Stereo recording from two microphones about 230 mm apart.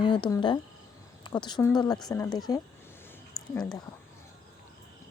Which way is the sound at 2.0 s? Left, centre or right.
Centre.